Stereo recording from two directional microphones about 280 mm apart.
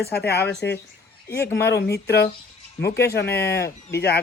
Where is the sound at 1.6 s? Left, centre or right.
Left.